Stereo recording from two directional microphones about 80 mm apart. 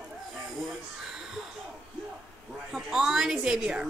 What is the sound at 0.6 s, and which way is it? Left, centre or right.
Speech, centre.